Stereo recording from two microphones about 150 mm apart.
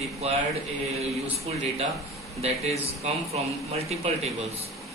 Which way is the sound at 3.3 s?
45° right (ahead or behind).